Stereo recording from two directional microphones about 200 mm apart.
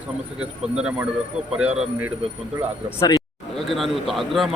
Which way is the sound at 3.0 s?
15° left (ahead or behind).